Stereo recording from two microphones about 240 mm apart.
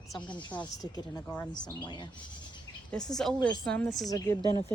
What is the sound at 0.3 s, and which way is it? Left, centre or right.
Speech, centre.